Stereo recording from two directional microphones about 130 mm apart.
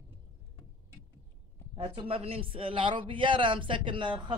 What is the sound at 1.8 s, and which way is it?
A man's voice, 45° right (ahead or behind).